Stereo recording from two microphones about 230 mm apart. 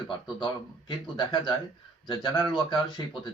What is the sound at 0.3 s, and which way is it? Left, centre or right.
Speech, left.